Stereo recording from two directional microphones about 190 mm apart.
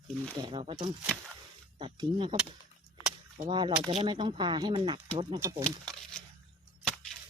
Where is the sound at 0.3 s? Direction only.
25° right (ahead or behind).